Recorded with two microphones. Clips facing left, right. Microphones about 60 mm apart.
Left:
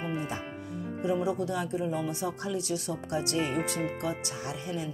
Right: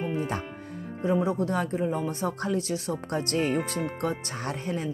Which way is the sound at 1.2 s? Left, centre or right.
Right.